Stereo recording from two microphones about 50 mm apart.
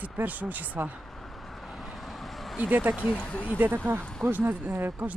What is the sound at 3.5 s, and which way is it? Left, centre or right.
Speech, right.